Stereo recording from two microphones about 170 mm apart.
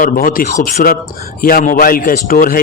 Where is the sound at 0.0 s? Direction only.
55° left (ahead or behind).